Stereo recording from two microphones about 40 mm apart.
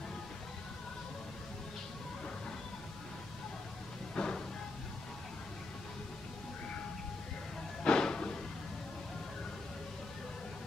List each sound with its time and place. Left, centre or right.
4.1 s music: left
7.8 s music: centre